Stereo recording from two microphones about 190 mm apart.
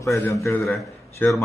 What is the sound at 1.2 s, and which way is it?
Speech, 10° left (ahead or behind).